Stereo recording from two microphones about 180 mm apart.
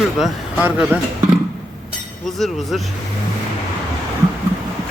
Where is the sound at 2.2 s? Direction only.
Centre (ahead or behind).